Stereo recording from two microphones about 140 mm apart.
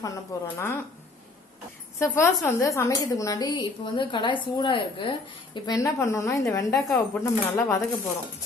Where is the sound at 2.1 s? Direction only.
20° left (ahead or behind); by 5.1 s 40° left (ahead or behind).